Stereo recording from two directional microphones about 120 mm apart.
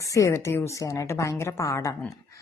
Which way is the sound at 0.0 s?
25° left (ahead or behind).